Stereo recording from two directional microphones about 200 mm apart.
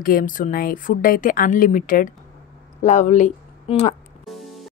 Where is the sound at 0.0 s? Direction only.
45° left (ahead or behind).